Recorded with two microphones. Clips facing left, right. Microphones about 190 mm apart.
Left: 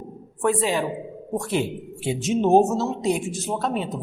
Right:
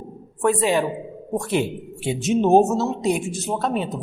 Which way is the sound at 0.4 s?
65° right (ahead or behind).